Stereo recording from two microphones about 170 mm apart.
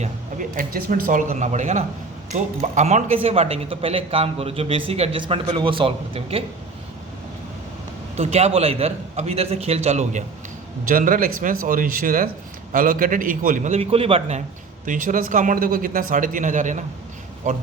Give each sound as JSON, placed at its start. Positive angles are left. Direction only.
{"t": 0.0, "sound": "speech", "side_deg": -50}
{"t": 8.1, "sound": "speech", "side_deg": -40}
{"t": 10.8, "sound": "speech", "side_deg": -55}
{"t": 13.7, "sound": "speech", "side_deg": -35}
{"t": 14.8, "sound": "speech", "side_deg": -50}